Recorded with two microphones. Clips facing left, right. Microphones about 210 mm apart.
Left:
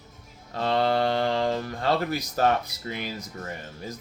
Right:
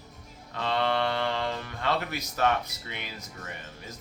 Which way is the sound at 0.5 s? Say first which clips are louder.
Left 4 dB; 40° left (ahead or behind).